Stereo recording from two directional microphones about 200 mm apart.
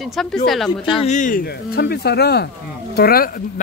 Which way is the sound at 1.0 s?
35° left (ahead or behind).